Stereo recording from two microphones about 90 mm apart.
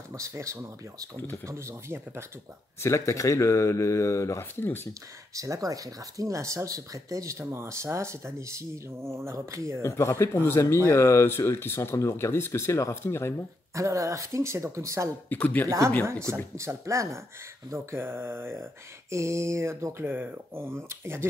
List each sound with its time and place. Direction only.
0.1 s speech: 35° right (ahead or behind)
2.8 s speech: 35° left (ahead or behind)
5.3 s speech: 35° right (ahead or behind)
9.8 s speech: 35° left (ahead or behind)
13.7 s speech: 35° right (ahead or behind)
15.2 s speech: 15° left (ahead or behind)
16.5 s speech: 35° right (ahead or behind)